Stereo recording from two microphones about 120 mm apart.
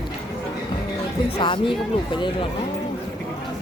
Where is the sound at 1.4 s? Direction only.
45° left (ahead or behind).